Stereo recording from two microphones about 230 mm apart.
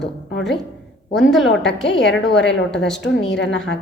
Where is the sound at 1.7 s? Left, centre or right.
Left.